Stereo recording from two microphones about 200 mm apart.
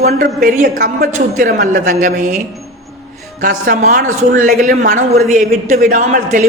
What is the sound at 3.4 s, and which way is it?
A woman's voice, 50° right (ahead or behind).